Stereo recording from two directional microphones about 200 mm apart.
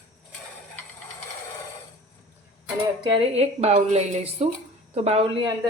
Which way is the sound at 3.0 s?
25° right (ahead or behind).